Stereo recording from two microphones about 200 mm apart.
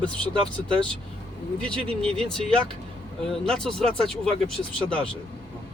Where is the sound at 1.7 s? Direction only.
5° left (ahead or behind).